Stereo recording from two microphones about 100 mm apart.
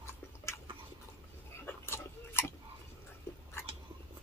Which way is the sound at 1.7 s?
25° left (ahead or behind).